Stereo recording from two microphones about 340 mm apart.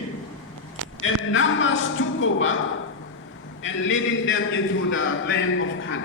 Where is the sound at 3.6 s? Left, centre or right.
Left.